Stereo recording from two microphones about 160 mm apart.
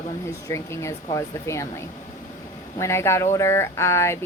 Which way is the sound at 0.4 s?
15° left (ahead or behind).